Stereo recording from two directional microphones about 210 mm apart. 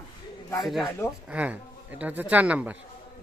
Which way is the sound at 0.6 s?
Centre (ahead or behind).